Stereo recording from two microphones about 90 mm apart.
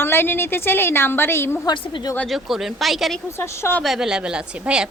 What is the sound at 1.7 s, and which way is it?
Speech, 55° left (ahead or behind).